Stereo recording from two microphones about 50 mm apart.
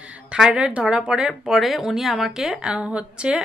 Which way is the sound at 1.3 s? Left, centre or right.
Centre.